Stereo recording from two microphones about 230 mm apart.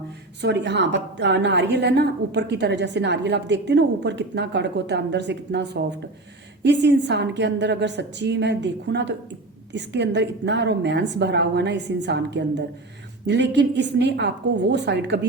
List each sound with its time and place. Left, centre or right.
0.4 s a woman's voice: right